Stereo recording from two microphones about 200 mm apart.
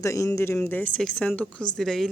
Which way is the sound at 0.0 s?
15° left (ahead or behind).